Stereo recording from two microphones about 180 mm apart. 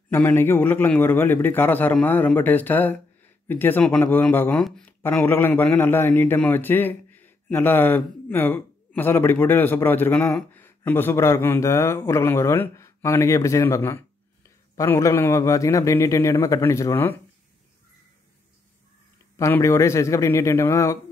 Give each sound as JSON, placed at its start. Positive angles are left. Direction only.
{"t": 0.1, "sound": "speech", "side_deg": 10}
{"t": 19.3, "sound": "speech", "side_deg": 15}